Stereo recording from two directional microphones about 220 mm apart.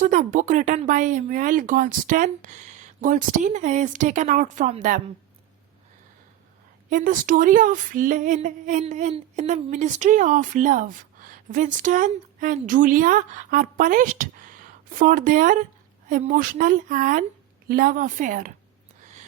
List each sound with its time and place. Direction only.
0.0 s speech: 35° right (ahead or behind)
6.9 s speech: 35° right (ahead or behind)